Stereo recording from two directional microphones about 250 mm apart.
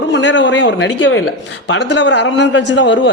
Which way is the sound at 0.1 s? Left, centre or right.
Left.